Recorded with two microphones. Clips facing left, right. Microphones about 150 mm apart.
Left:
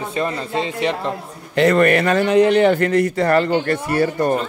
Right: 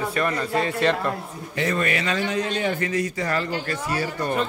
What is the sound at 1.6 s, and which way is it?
A man's voice, 70° left (ahead or behind).